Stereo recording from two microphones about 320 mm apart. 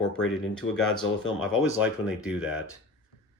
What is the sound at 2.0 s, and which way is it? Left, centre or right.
Speech, centre.